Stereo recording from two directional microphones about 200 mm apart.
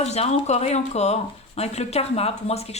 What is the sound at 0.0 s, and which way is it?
A woman's voice, 35° left (ahead or behind).